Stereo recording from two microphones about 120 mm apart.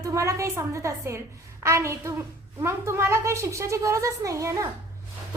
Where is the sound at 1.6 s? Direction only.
25° right (ahead or behind).